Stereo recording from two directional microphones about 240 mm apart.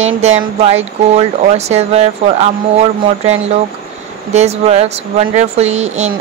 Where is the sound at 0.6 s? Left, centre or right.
Right.